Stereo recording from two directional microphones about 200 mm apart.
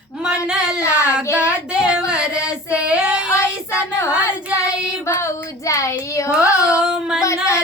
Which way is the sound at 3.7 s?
15° left (ahead or behind).